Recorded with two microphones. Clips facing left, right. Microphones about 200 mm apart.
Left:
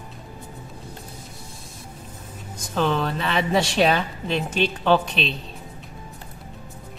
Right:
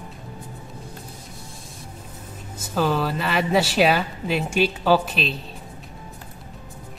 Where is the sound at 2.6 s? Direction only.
5° right (ahead or behind).